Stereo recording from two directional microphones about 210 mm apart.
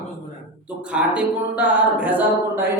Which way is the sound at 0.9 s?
5° right (ahead or behind).